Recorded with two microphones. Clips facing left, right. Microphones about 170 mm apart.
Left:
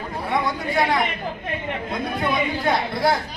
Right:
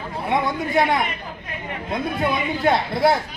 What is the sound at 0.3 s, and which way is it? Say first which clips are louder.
Chatter: right 2 dB; 20° right (ahead or behind).